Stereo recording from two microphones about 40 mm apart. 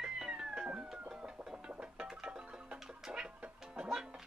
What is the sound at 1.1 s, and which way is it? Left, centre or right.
Music, centre.